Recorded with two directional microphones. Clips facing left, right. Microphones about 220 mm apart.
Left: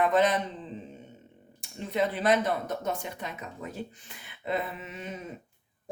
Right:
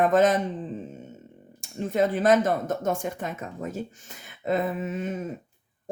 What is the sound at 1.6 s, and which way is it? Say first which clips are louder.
Speech: right 5 dB; 45° right (ahead or behind).